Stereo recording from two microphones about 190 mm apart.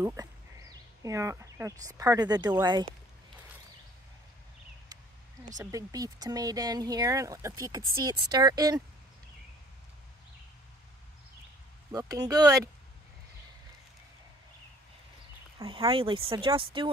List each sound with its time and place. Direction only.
0.0 s speech: 15° right (ahead or behind)
5.6 s speech: 20° right (ahead or behind)
11.9 s speech: 20° right (ahead or behind)
15.6 s speech: 25° right (ahead or behind)